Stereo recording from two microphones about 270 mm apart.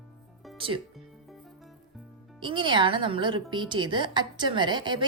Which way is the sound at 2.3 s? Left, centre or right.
Centre.